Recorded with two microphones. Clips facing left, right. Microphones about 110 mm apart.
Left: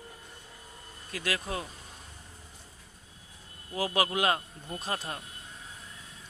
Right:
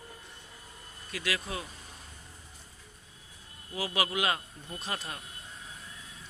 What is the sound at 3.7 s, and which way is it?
A man's voice, 45° left (ahead or behind).